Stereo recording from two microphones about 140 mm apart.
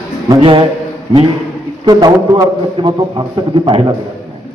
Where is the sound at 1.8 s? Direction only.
30° right (ahead or behind).